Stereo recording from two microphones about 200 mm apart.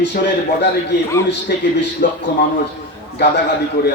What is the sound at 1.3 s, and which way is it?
Speech, 60° left (ahead or behind).